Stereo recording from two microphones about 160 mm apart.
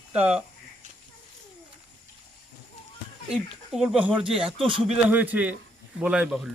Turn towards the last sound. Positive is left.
turn(degrees=-5)  # may be behind; listen again after turning